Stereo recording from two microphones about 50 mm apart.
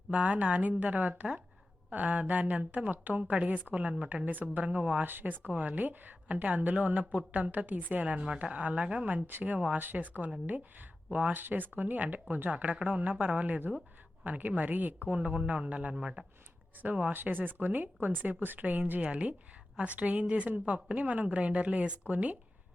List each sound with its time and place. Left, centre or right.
0.1 s speech: right
5.0 s speech: right
16.0 s speech: centre
16.8 s speech: right